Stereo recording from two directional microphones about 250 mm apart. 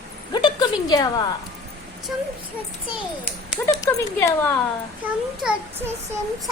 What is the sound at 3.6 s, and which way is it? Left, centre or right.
Speech, centre.